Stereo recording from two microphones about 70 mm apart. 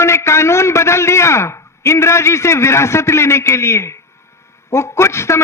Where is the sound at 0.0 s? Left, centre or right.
Left.